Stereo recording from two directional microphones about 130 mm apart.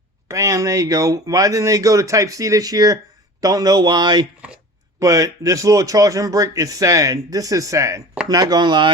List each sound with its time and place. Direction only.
0.3 s speech: 25° right (ahead or behind)